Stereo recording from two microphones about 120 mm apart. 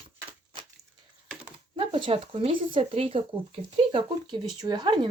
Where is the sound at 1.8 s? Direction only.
45° right (ahead or behind).